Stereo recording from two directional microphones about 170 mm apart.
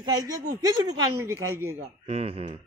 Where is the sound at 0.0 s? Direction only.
25° right (ahead or behind).